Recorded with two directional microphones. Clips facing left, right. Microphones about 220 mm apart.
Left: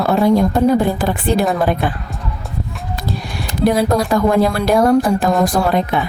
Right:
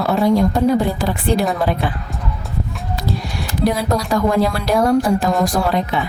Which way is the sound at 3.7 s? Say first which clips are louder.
Left 4 dB; 55° left (ahead or behind).